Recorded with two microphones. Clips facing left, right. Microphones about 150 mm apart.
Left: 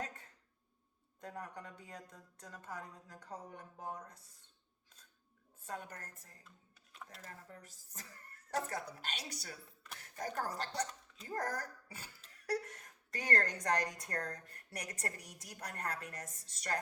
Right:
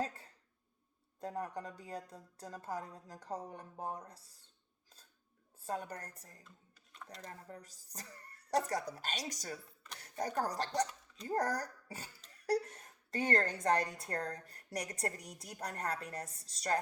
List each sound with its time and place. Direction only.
1.2 s speech: 35° right (ahead or behind)
5.6 s speech: 35° right (ahead or behind)
7.4 s speech: 35° right (ahead or behind)